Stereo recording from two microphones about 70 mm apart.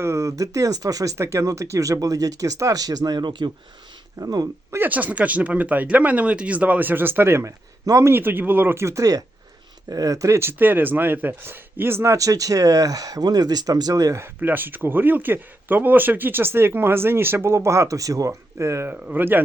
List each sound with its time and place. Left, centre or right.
0.0 s speech: right
1.1 s speech: right
4.2 s speech: right
4.9 s speech: right
9.0 s speech: right
10.6 s speech: right
12.1 s speech: right
14.2 s speech: right
18.9 s speech: right